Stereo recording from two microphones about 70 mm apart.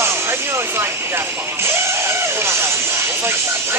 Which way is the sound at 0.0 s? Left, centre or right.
Right.